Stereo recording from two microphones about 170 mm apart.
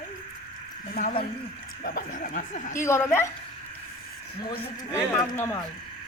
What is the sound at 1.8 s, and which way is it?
Speech, 60° left (ahead or behind).